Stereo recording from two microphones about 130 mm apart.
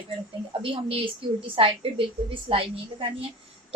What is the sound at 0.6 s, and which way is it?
A woman's voice, 45° right (ahead or behind).